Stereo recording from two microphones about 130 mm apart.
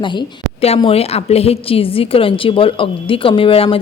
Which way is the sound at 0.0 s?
35° left (ahead or behind).